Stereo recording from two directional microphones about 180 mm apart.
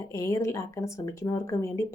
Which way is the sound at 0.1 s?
15° left (ahead or behind).